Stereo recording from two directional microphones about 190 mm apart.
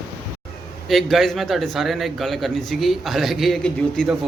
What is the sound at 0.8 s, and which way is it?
A man's voice, centre (ahead or behind).